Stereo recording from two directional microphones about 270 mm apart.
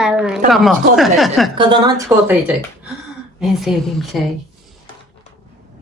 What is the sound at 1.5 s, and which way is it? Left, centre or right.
Speech, centre.